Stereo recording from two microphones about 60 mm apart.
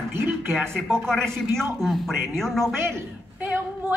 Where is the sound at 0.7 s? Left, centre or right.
Right.